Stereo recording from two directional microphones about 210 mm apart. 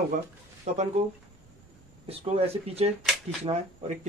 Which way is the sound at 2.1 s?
30° right (ahead or behind).